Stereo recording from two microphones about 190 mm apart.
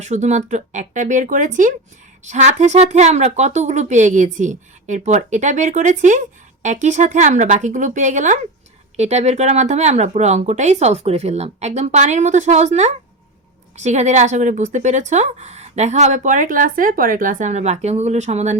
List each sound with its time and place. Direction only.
0.0 s speech: 40° right (ahead or behind)